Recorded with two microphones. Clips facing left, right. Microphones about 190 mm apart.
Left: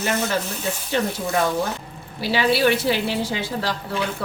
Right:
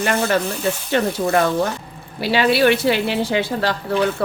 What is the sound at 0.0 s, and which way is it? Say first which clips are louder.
Speech: right 4 dB; 60° right (ahead or behind).